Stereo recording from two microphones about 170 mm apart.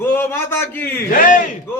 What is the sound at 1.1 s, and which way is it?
Speech, 50° left (ahead or behind).